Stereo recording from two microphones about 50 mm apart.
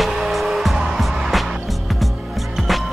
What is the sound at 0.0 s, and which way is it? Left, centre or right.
Music, centre.